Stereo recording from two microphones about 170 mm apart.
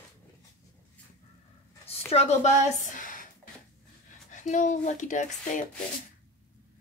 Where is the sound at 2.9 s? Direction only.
50° left (ahead or behind).